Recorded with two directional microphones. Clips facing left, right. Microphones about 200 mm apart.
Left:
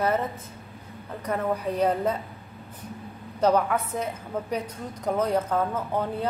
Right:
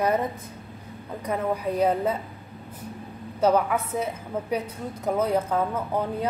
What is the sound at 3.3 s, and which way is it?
Speech, 5° right (ahead or behind).